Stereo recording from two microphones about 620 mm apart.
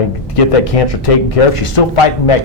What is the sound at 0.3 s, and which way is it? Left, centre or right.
Speech, left.